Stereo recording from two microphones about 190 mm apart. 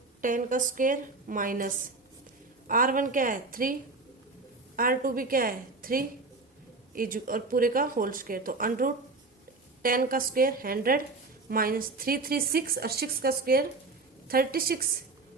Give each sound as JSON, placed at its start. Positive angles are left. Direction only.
{"t": 0.2, "sound": "a woman's voice", "side_deg": -45}
{"t": 4.8, "sound": "a woman's voice", "side_deg": -50}